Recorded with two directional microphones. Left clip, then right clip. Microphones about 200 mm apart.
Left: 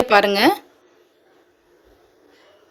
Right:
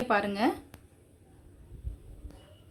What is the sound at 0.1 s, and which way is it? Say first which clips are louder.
Speech: left 12 dB; 50° left (ahead or behind).